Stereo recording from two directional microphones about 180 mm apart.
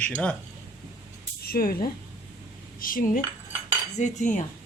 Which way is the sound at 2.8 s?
50° left (ahead or behind).